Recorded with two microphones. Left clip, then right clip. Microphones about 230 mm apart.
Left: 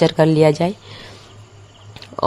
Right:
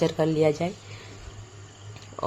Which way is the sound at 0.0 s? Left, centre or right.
Left.